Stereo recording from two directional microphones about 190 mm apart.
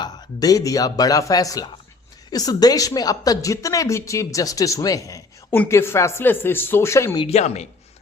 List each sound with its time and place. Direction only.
0.0 s a woman's voice: 20° left (ahead or behind)
7.3 s a woman's voice: 35° left (ahead or behind)